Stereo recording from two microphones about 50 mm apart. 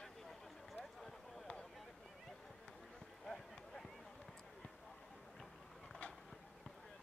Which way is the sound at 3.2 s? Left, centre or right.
Centre.